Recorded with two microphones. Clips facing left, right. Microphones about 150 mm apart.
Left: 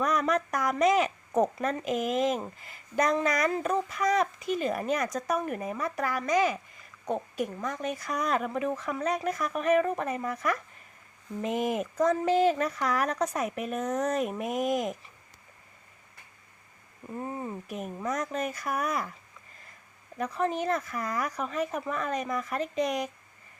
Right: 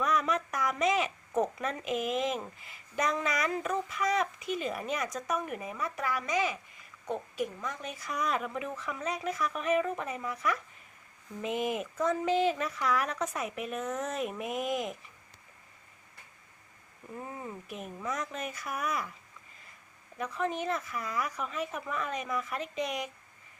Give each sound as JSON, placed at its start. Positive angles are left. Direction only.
{"t": 0.0, "sound": "a woman's voice", "side_deg": 40}
{"t": 17.2, "sound": "speech", "side_deg": 35}
{"t": 20.1, "sound": "speech", "side_deg": 35}